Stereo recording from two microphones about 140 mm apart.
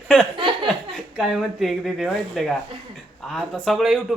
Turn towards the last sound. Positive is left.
turn(degrees=0)  # may be behind; listen again after turning